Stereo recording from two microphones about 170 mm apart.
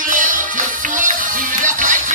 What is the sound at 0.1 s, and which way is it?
Music, 50° right (ahead or behind).